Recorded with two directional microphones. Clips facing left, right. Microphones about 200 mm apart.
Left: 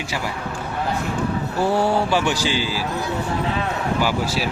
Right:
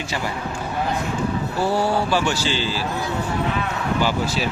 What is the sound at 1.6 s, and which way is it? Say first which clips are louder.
Speech: left 2 dB; 20° left (ahead or behind).